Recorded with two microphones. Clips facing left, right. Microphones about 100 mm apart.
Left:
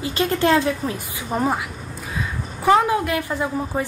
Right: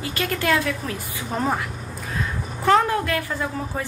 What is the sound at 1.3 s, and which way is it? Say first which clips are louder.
Speech: left 2 dB; 10° left (ahead or behind).